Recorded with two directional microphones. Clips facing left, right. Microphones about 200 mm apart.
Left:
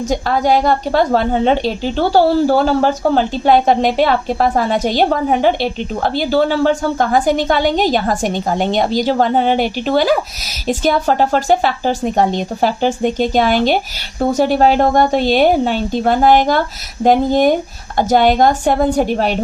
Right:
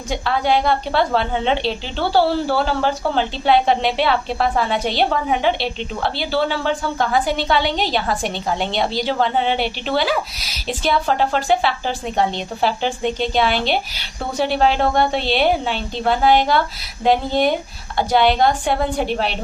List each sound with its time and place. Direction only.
0.1 s a woman's voice: 45° left (ahead or behind)